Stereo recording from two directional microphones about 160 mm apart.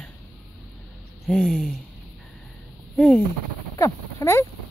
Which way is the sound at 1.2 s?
5° left (ahead or behind).